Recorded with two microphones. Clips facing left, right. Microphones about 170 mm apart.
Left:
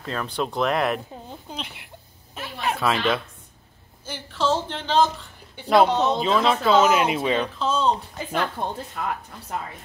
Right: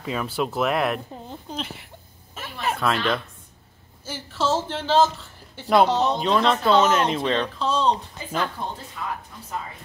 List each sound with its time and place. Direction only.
0.0 s speech: 5° right (ahead or behind)
2.3 s a sound: centre (ahead or behind)
4.0 s speech: 5° right (ahead or behind)
9.0 s speech: 55° left (ahead or behind)